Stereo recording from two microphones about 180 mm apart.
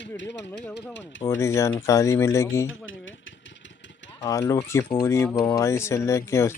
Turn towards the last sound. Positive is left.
turn(degrees=15)  # may be behind; listen again after turning